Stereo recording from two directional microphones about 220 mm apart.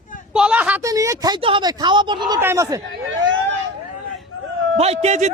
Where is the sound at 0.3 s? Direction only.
5° right (ahead or behind).